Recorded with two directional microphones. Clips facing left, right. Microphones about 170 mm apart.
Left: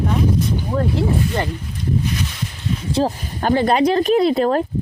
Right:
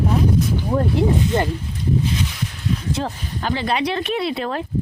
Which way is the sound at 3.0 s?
30° left (ahead or behind).